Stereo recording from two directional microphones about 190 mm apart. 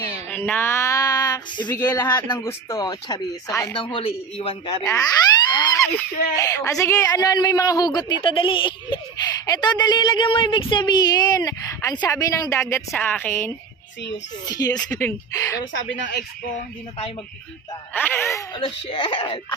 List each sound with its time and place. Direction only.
0.3 s speech: 10° left (ahead or behind)
16.0 s speech: 45° left (ahead or behind)
17.9 s speech: 10° left (ahead or behind)